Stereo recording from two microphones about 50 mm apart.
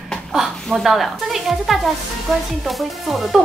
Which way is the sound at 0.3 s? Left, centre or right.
Centre.